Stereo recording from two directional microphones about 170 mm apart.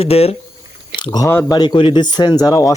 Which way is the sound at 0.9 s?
25° left (ahead or behind).